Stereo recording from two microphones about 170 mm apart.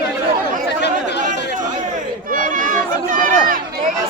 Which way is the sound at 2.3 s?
50° right (ahead or behind).